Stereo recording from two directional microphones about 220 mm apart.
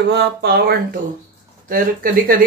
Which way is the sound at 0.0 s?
50° right (ahead or behind).